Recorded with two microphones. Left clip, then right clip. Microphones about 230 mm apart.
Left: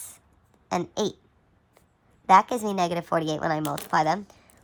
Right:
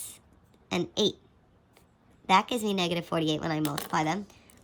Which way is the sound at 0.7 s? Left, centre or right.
Centre.